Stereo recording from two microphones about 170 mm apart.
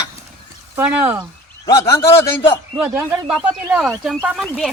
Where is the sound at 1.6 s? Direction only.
15° left (ahead or behind).